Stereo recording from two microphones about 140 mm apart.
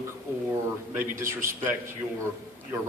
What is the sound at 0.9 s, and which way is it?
Speech, 20° right (ahead or behind).